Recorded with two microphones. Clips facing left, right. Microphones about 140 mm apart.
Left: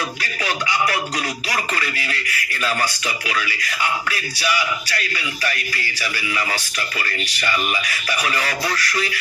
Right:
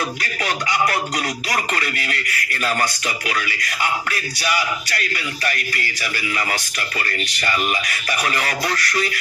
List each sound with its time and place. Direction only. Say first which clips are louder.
0.4 s speech: right 1 dB; 30° right (ahead or behind)
6.0 s speech: left 1 dB; 30° right (ahead or behind)